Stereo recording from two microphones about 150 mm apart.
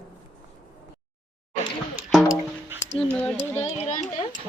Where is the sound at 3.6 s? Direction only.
45° left (ahead or behind).